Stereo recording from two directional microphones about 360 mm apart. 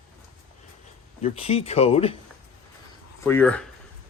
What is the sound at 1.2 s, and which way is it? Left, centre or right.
Speech, centre.